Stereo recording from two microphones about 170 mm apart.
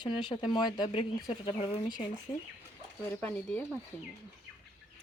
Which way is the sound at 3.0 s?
10° left (ahead or behind).